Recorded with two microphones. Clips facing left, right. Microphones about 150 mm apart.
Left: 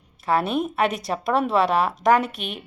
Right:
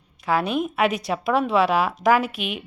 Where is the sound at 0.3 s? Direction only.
Centre (ahead or behind).